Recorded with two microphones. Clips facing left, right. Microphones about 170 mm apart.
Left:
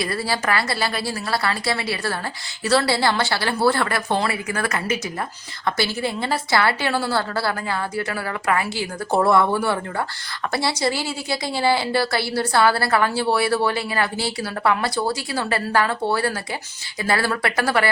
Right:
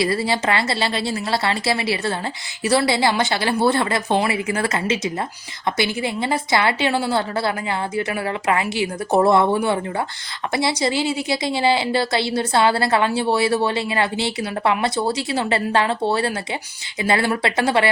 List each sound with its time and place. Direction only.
0.0 s a woman's voice: 25° right (ahead or behind)